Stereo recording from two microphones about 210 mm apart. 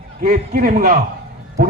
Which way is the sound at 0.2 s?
40° right (ahead or behind).